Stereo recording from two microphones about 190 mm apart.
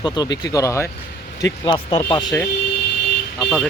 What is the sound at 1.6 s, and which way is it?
Speech, 25° left (ahead or behind).